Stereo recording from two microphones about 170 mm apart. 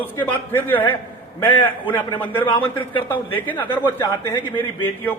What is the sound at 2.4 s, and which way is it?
Speech, 30° left (ahead or behind).